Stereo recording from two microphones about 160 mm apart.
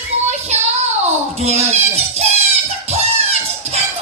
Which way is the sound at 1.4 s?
40° right (ahead or behind).